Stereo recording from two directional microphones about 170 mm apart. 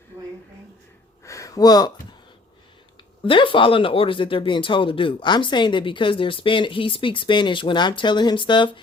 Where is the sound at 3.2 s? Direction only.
30° left (ahead or behind).